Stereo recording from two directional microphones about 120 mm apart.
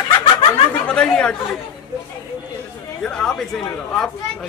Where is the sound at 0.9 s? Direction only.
10° left (ahead or behind).